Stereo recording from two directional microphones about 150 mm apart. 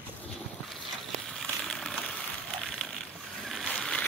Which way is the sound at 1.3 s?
5° left (ahead or behind).